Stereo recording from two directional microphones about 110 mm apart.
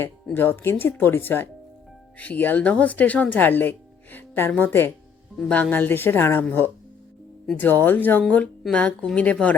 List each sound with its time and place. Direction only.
0.3 s speech: 20° left (ahead or behind)